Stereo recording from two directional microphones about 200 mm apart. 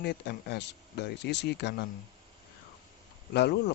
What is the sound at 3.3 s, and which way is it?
Speech, 55° left (ahead or behind).